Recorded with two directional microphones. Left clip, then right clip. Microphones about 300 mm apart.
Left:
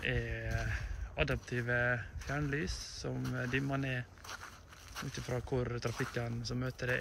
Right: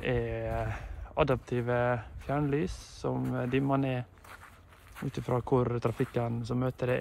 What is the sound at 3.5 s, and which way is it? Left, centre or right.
Speech, centre.